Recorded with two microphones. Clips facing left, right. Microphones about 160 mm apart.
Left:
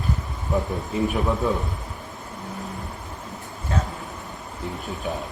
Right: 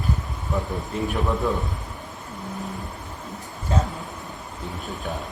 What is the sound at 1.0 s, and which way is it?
Speech, centre (ahead or behind).